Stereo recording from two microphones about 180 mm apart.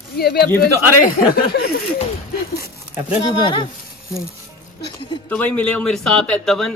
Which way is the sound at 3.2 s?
25° left (ahead or behind).